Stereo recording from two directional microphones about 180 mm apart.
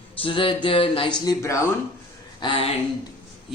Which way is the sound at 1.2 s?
15° left (ahead or behind).